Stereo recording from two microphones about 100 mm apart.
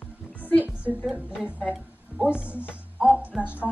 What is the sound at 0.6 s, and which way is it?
A woman's voice, 15° right (ahead or behind).